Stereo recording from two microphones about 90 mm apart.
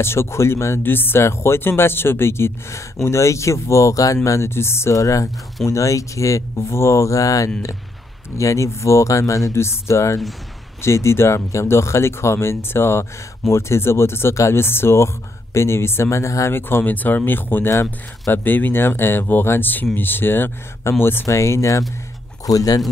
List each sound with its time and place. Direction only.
0.0 s speech: 30° left (ahead or behind)